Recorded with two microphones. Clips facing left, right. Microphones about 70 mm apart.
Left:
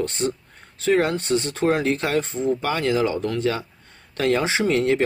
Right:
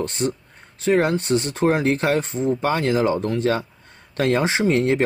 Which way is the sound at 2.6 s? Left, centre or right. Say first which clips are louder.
Right 4 dB; right.